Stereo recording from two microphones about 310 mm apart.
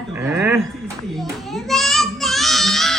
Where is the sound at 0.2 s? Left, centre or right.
Centre.